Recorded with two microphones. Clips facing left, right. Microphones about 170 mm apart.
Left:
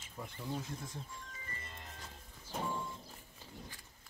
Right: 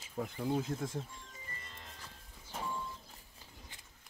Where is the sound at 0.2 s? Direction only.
70° right (ahead or behind).